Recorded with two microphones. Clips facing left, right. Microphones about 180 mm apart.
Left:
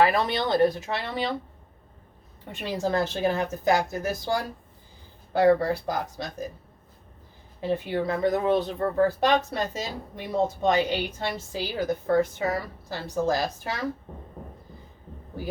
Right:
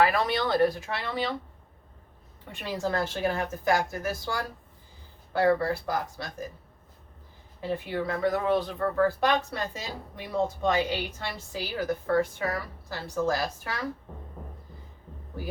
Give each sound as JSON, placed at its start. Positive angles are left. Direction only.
{"t": 0.0, "sound": "a woman's voice", "side_deg": 25}
{"t": 2.5, "sound": "a woman's voice", "side_deg": 20}
{"t": 7.6, "sound": "a woman's voice", "side_deg": 25}